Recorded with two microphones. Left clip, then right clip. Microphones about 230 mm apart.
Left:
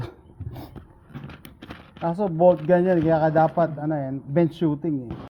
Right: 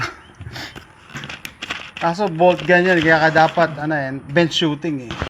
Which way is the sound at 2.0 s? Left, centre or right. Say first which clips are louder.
Right 3 dB; centre.